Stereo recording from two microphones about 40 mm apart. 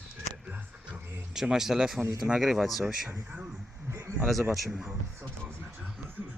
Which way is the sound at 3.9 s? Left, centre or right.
Right.